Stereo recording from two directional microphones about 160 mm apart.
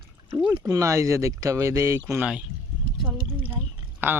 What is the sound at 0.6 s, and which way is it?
Speech, 20° right (ahead or behind).